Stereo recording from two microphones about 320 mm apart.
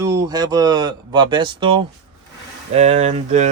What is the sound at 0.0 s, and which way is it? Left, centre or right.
Speech, centre.